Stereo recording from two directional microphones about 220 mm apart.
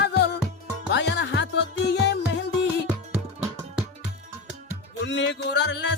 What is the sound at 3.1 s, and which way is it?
Music, 5° right (ahead or behind).